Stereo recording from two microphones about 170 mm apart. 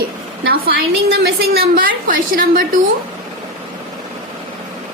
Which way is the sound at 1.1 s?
70° right (ahead or behind).